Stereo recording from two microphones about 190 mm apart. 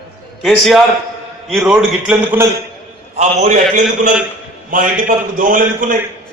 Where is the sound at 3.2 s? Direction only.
35° right (ahead or behind).